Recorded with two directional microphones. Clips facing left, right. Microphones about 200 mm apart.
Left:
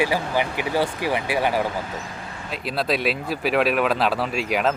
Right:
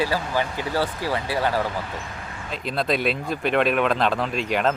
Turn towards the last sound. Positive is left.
turn(degrees=5)  # may be behind; listen again after turning